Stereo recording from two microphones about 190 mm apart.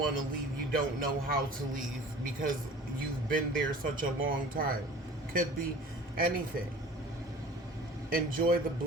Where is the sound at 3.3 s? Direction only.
45° right (ahead or behind).